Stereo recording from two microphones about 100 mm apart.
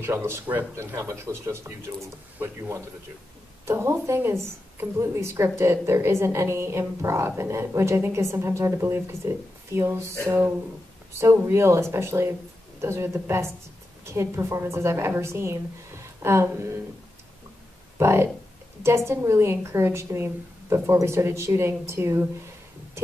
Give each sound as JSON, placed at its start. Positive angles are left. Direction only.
{"t": 0.0, "sound": "a woman's voice", "side_deg": -25}
{"t": 2.3, "sound": "speech", "side_deg": -15}
{"t": 3.6, "sound": "a woman's voice", "side_deg": -25}
{"t": 17.9, "sound": "a woman's voice", "side_deg": -25}